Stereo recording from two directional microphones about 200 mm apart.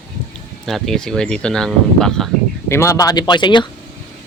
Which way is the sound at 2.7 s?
15° left (ahead or behind).